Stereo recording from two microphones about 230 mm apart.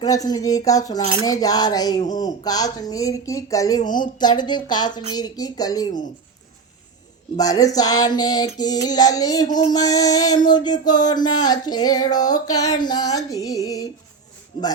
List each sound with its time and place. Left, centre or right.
0.0 s speech: centre
7.3 s speech: centre